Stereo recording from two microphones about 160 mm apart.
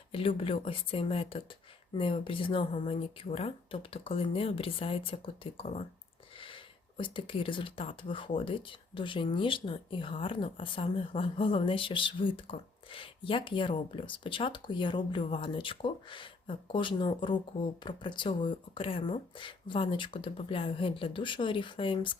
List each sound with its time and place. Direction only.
0.1 s speech: 35° left (ahead or behind)